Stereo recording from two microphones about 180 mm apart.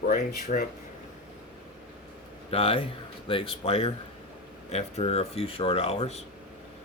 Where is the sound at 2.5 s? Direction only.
30° left (ahead or behind).